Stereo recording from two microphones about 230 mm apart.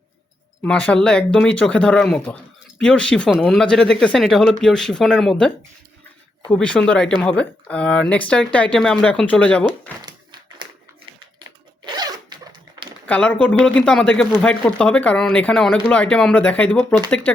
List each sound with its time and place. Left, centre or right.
0.6 s speech: centre
11.9 s zipper: centre
13.1 s speech: centre